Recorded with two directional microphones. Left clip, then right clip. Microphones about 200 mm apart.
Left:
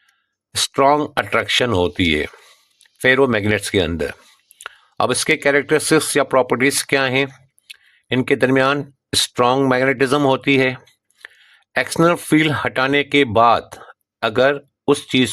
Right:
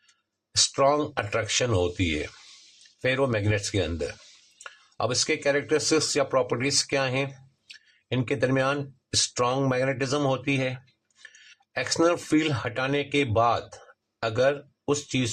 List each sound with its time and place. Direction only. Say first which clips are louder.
0.7 s speech: left 10 dB; 40° left (ahead or behind)